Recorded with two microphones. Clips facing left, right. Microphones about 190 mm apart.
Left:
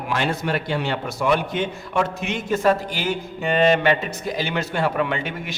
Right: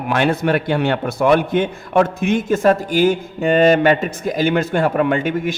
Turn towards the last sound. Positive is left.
turn(degrees=-50)  # may be behind; listen again after turning